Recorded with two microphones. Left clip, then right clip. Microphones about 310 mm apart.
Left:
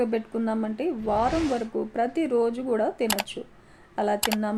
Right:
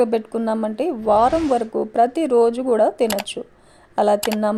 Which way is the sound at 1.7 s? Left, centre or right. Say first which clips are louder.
Right 9 dB; right.